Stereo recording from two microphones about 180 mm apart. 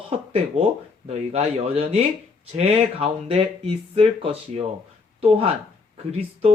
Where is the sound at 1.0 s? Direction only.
35° right (ahead or behind).